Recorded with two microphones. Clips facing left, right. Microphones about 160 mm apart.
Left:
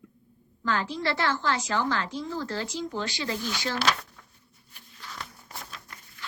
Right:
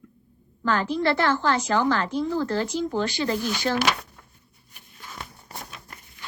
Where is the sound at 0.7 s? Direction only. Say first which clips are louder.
Right 6 dB; 50° right (ahead or behind).